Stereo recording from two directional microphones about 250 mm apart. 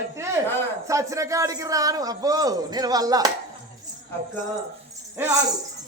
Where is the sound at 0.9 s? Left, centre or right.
Centre.